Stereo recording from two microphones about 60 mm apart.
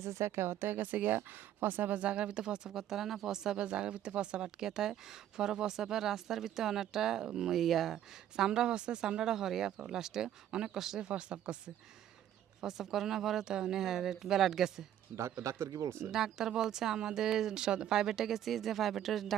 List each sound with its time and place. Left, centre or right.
0.0 s speech: right; by 11.7 s centre
12.6 s speech: centre
15.1 s speech: right
15.9 s speech: right
16.1 s speech: centre